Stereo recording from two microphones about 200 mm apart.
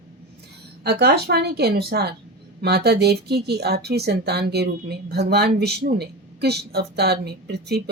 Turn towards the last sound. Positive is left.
turn(degrees=-55)  # may be behind; listen again after turning